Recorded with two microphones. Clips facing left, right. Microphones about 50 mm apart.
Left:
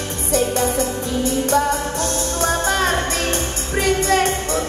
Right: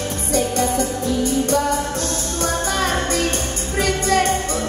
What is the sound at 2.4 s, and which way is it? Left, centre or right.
Music, left.